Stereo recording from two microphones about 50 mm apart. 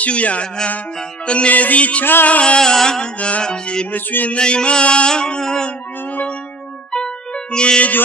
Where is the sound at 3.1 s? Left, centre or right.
Left.